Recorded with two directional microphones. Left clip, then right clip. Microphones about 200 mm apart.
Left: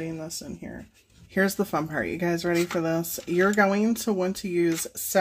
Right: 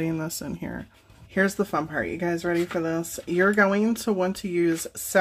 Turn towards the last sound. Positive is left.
turn(degrees=0)  # may be behind; listen again after turning